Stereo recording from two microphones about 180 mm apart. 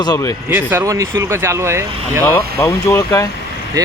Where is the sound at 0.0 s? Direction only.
20° left (ahead or behind).